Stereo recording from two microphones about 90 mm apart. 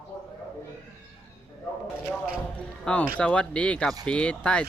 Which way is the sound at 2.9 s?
10° left (ahead or behind).